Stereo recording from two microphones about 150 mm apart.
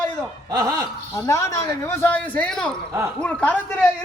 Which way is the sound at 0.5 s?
25° right (ahead or behind).